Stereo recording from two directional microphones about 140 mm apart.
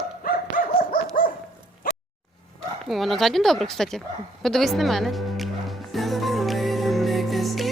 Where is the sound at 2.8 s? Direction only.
Centre (ahead or behind).